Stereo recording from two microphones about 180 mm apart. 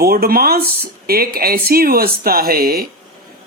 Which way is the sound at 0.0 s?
60° right (ahead or behind).